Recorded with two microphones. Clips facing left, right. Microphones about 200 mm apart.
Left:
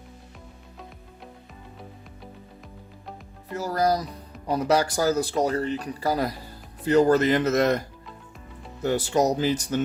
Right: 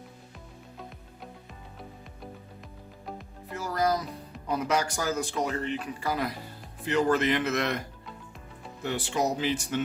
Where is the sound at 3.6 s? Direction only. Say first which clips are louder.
Left 4 dB; 35° left (ahead or behind).